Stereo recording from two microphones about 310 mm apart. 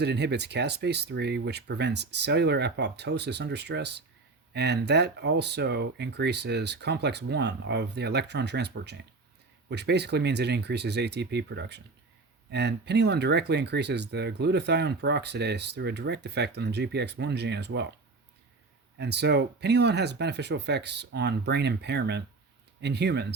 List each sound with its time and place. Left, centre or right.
0.0 s speech: right
18.9 s speech: right